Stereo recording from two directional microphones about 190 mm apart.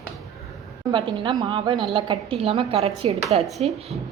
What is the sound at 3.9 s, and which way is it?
Speech, 35° right (ahead or behind).